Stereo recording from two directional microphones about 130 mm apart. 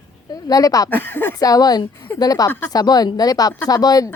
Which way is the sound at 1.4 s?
30° left (ahead or behind).